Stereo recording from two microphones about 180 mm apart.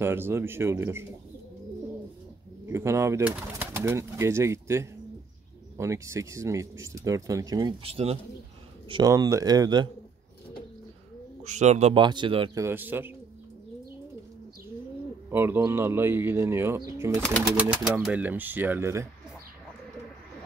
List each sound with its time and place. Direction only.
0.0 s speech: 15° right (ahead or behind)
2.7 s speech: 15° right (ahead or behind)
7.8 s speech: 35° right (ahead or behind)
8.8 s speech: 25° right (ahead or behind)
11.4 s speech: 40° right (ahead or behind)
12.0 s speech: 25° right (ahead or behind)
12.5 s speech: 10° right (ahead or behind)
15.3 s speech: 10° right (ahead or behind)
17.1 s speech: 5° left (ahead or behind)
17.9 s speech: 10° right (ahead or behind)